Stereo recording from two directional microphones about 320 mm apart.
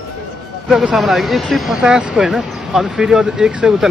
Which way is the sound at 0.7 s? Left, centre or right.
Centre.